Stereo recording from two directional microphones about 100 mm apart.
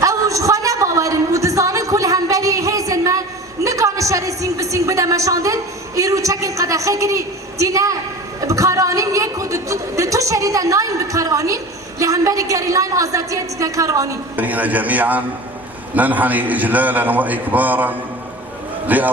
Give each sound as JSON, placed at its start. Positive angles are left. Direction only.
{"t": 0.0, "sound": "a sound", "side_deg": -30}
{"t": 6.0, "sound": "a woman's voice", "side_deg": -30}
{"t": 14.3, "sound": "a man's voice", "side_deg": -15}